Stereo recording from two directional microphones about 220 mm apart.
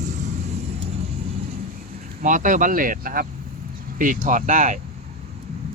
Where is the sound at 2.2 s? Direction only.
35° right (ahead or behind).